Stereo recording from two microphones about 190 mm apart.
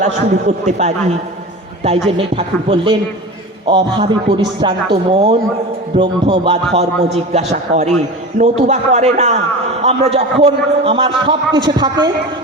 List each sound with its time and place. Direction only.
0.0 s a man's voice: 40° right (ahead or behind)
2.1 s a man's voice: 30° right (ahead or behind)
7.3 s a man's voice: 40° right (ahead or behind); by 12.1 s 20° right (ahead or behind)